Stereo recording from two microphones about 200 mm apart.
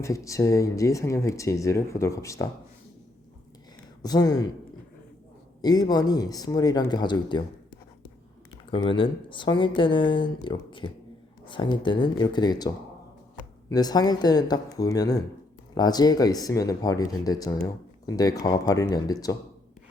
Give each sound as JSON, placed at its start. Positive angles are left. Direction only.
{"t": 0.0, "sound": "speech", "side_deg": 15}
{"t": 4.0, "sound": "speech", "side_deg": 20}
{"t": 5.6, "sound": "speech", "side_deg": 20}
{"t": 8.7, "sound": "speech", "side_deg": 25}